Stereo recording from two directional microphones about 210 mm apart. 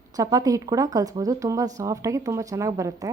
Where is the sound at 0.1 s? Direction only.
15° right (ahead or behind).